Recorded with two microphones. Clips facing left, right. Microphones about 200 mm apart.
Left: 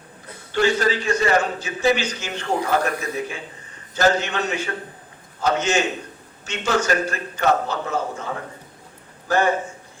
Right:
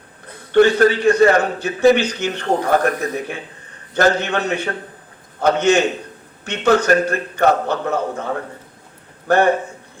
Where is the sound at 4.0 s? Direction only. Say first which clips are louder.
Right 3 dB; 60° right (ahead or behind).